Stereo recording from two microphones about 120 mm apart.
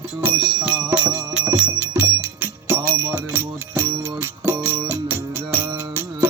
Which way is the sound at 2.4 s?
15° right (ahead or behind).